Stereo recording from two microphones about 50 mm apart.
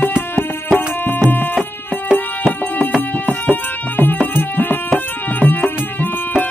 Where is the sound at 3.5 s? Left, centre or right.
Left.